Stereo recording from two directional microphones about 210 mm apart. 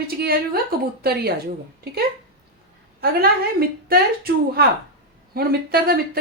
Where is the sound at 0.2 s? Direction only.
45° right (ahead or behind).